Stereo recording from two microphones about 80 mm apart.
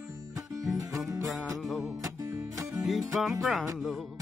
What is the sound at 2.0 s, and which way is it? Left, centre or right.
Music, right.